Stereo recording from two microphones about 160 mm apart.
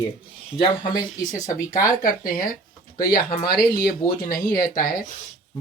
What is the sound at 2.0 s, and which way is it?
Speech, 60° left (ahead or behind).